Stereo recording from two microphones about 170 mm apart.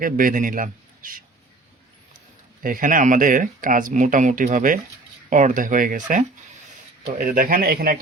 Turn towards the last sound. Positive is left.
turn(degrees=-65)  # may be behind; listen again after turning